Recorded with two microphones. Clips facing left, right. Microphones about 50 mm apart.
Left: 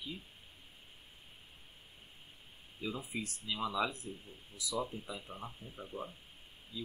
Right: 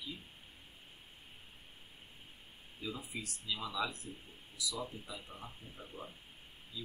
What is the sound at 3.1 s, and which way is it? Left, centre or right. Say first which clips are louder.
Speech: left 2 dB; left.